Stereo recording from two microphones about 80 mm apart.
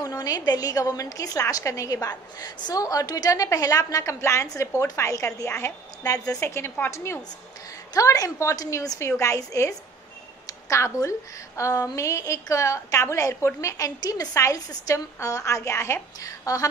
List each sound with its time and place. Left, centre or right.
0.0 s a woman's voice: left
6.4 s a woman's voice: left
7.9 s a woman's voice: left
14.3 s a woman's voice: left